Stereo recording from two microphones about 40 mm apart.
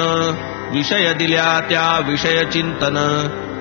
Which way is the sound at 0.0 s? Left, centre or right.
Centre.